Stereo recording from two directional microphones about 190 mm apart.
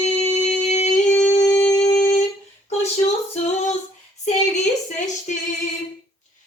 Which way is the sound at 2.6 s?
35° left (ahead or behind).